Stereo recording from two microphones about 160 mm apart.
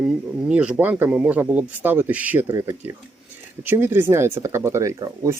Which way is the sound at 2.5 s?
20° right (ahead or behind).